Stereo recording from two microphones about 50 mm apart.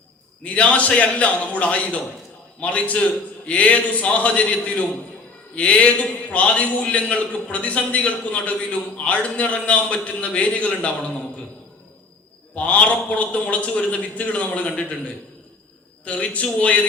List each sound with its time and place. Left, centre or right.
0.4 s a man's voice: left
12.5 s a man's voice: left
16.0 s a man's voice: left